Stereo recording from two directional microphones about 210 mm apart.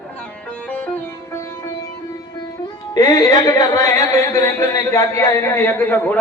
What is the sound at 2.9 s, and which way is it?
A man's voice, 20° left (ahead or behind).